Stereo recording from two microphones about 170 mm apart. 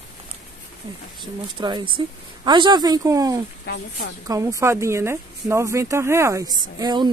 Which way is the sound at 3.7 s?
80° left.